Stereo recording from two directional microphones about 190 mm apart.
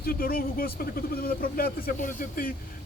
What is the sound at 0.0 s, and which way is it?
Speech, 50° left (ahead or behind).